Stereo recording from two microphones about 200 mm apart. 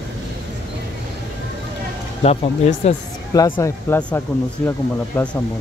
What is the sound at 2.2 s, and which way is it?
Speech, 35° left (ahead or behind).